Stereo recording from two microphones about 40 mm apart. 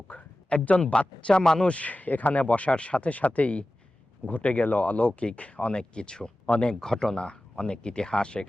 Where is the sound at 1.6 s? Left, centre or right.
Left.